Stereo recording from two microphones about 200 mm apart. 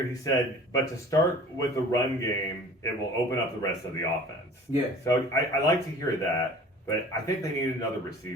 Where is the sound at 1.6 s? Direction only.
15° left (ahead or behind).